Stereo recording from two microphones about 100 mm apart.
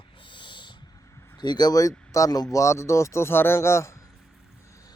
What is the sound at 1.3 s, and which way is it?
Speech, 45° left (ahead or behind).